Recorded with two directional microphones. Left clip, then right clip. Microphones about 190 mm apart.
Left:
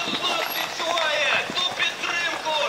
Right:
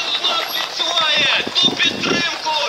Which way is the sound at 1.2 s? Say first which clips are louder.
Right 7 dB; 35° right (ahead or behind).